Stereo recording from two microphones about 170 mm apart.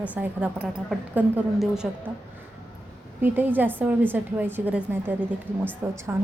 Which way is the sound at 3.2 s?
10° right (ahead or behind).